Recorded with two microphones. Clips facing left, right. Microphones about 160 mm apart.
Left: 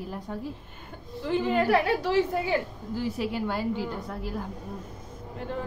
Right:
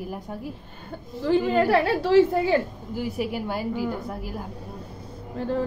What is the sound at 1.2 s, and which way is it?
A woman's voice, 35° right (ahead or behind).